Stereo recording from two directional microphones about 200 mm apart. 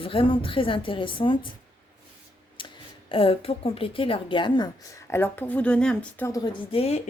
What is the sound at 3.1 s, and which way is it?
A woman's voice, 30° left (ahead or behind).